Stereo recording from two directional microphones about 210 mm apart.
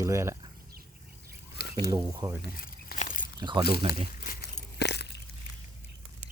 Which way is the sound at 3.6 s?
50° left (ahead or behind).